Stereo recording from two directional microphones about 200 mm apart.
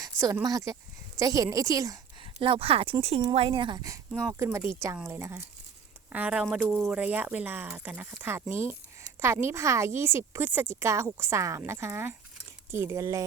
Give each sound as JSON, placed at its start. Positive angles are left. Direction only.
{"t": 0.0, "sound": "a woman's voice", "side_deg": -15}